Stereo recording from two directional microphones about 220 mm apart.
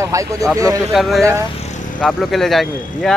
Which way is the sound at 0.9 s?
Centre (ahead or behind).